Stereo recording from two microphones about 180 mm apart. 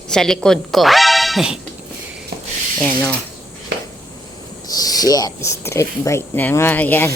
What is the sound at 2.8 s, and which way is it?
Speech, 10° left (ahead or behind).